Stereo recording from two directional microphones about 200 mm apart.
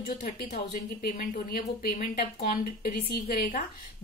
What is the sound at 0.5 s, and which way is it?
A woman's voice, 45° left (ahead or behind).